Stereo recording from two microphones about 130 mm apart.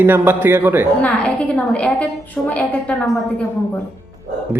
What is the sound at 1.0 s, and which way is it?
A woman's voice, 10° left (ahead or behind).